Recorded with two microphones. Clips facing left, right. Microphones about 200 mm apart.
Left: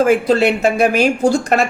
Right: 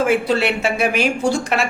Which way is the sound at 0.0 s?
40° left (ahead or behind).